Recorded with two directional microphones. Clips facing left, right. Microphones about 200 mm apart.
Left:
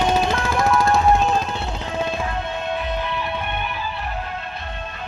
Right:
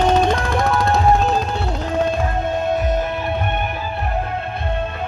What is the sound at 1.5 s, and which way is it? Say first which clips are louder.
Music: right 5 dB; 45° right (ahead or behind).